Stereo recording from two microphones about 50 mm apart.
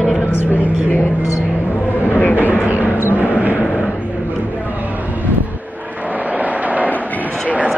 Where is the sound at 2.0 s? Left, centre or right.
Left.